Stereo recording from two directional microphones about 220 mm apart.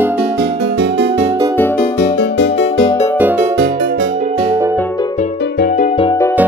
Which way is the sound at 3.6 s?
50° right (ahead or behind).